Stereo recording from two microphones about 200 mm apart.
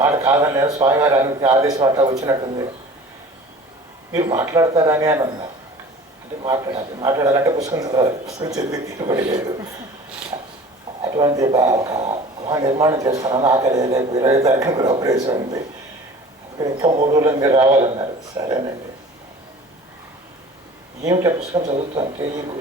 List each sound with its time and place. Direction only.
0.0 s a man's voice: 20° right (ahead or behind)
4.1 s a man's voice: 20° right (ahead or behind)
11.0 s a man's voice: 20° right (ahead or behind)
12.0 s a sound: 30° right (ahead or behind)
12.5 s a man's voice: 15° right (ahead or behind)
16.6 s a man's voice: 20° right (ahead or behind)
21.5 s a man's voice: 20° right (ahead or behind)